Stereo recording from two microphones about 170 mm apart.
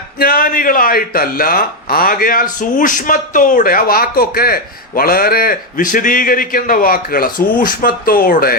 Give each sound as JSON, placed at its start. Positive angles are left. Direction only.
{"t": 0.2, "sound": "speech", "side_deg": 60}